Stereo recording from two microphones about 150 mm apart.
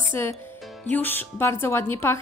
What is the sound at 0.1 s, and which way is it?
Speech, 15° left (ahead or behind).